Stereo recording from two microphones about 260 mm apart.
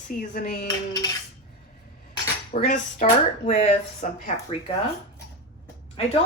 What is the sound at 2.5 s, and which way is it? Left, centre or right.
Speech, left.